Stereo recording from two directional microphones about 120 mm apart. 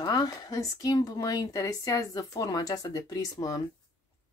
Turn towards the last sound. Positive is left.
turn(degrees=30)  # may be behind; listen again after turning